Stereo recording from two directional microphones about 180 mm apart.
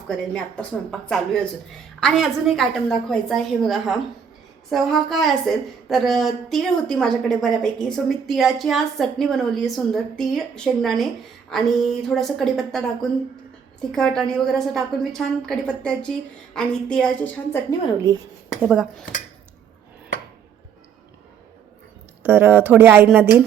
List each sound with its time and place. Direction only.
0.1 s a woman's voice: 5° left (ahead or behind)
17.7 s a woman's voice: 20° left (ahead or behind)
18.6 s a woman's voice: 5° right (ahead or behind)
22.2 s a woman's voice: 10° right (ahead or behind)